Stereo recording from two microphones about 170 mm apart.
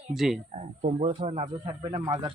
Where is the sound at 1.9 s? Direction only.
25° right (ahead or behind).